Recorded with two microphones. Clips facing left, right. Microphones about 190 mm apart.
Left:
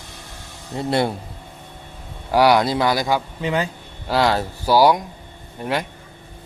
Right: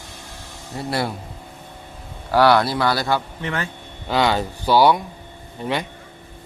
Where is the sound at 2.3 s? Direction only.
15° left (ahead or behind).